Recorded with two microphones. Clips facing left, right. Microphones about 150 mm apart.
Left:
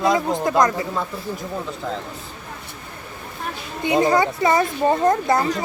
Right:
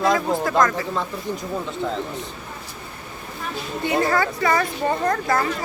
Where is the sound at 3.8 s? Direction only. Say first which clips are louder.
Left 4 dB; 20° left (ahead or behind).